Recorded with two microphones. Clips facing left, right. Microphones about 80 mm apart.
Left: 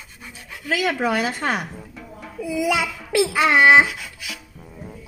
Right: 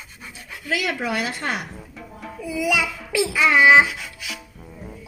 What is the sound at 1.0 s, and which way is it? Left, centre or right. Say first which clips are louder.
Speech: left 4 dB; left.